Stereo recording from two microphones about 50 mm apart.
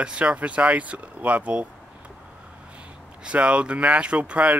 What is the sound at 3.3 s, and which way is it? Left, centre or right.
Speech, right.